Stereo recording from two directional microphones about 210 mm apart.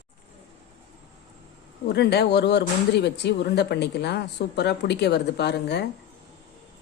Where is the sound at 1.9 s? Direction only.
50° left (ahead or behind).